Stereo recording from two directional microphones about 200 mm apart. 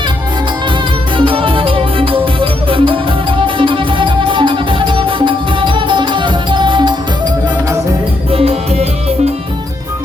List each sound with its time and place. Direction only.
1.2 s music: 25° right (ahead or behind)
8.3 s music: 30° right (ahead or behind)